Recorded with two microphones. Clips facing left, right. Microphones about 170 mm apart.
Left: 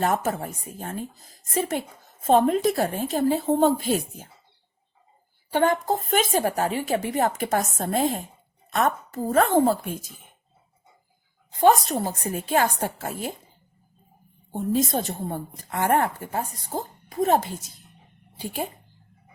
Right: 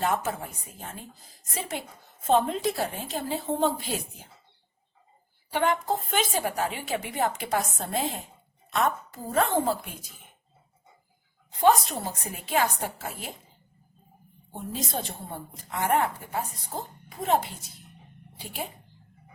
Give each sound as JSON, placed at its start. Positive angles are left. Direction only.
{"t": 0.0, "sound": "speech", "side_deg": 45}
{"t": 5.5, "sound": "speech", "side_deg": 45}
{"t": 11.6, "sound": "speech", "side_deg": 45}
{"t": 14.5, "sound": "speech", "side_deg": 45}